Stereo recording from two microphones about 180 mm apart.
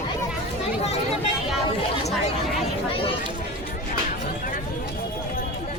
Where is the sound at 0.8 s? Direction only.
35° left (ahead or behind).